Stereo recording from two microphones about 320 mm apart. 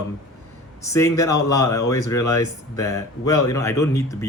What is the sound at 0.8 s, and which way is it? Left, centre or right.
Speech, centre.